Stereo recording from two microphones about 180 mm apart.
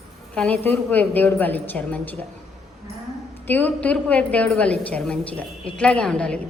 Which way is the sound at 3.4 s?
10° left (ahead or behind).